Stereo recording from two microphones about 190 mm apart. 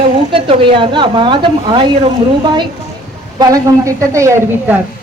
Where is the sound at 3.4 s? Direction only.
20° right (ahead or behind).